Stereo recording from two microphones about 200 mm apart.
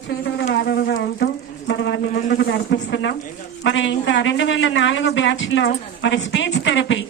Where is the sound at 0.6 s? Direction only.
55° left (ahead or behind).